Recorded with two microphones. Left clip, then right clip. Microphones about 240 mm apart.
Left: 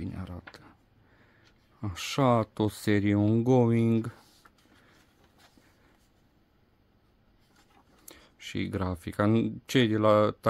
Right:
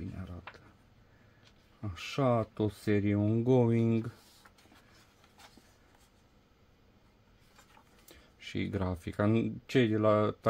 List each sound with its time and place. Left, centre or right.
0.0 s a sound: left
1.8 s speech: left
8.1 s speech: left